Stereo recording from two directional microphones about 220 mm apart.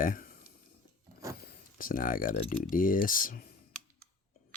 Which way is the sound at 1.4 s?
40° left (ahead or behind).